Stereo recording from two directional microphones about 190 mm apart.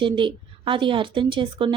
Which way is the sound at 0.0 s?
25° right (ahead or behind).